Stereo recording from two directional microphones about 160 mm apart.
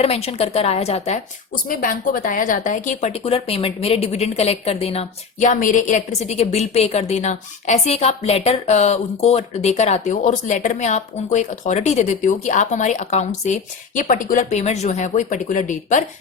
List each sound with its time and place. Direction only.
0.0 s speech: 40° left (ahead or behind)
1.6 s a woman's voice: 60° left (ahead or behind)